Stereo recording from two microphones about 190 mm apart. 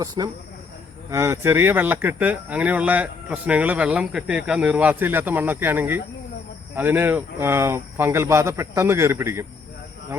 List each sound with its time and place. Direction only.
0.0 s speech: 20° right (ahead or behind)